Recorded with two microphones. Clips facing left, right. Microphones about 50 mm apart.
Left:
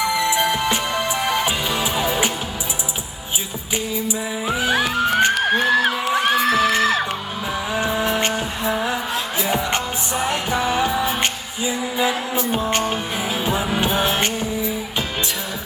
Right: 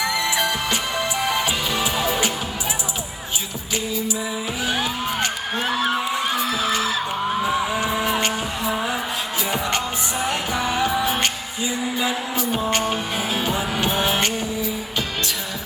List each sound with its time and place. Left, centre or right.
0.5 s music: centre
4.7 s music: left
7.4 s music: centre
10.2 s music: centre
11.9 s music: centre
12.6 s music: centre
13.1 s music: centre